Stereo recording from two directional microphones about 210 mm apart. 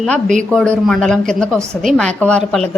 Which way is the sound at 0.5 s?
5° left (ahead or behind).